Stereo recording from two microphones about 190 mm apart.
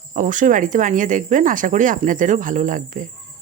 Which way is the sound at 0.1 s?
40° right (ahead or behind).